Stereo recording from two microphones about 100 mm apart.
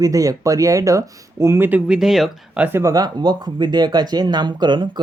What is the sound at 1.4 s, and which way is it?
Speech, 25° right (ahead or behind).